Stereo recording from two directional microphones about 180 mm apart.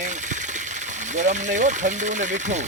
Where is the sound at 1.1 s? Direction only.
40° right (ahead or behind).